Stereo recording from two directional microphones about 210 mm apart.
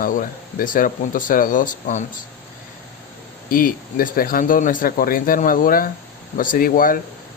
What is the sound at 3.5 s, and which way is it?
Speech, 45° left (ahead or behind).